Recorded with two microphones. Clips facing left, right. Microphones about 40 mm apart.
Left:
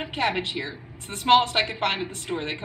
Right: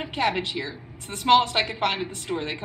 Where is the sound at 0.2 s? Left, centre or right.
Left.